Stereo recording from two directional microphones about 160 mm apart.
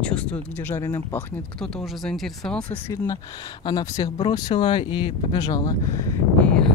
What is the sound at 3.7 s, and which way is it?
Speech, 25° left (ahead or behind).